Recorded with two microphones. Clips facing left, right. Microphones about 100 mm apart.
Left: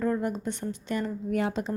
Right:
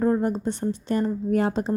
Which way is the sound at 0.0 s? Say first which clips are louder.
Right 6 dB; 35° right (ahead or behind).